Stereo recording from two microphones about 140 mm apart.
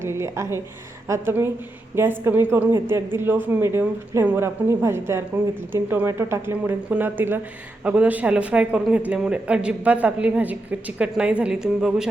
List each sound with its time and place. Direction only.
0.0 s speech: 20° right (ahead or behind)